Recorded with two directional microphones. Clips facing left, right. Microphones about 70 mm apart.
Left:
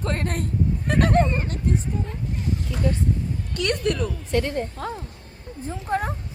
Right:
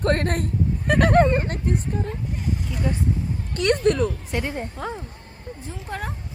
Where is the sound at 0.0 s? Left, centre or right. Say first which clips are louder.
Right 5 dB; right.